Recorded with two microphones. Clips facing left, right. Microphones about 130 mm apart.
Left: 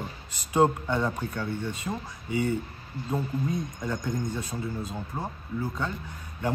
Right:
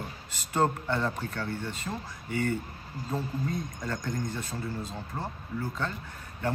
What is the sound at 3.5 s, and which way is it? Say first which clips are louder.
Speech: left 3 dB; 20° left (ahead or behind).